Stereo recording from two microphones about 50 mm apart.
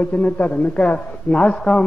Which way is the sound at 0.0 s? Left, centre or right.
Left.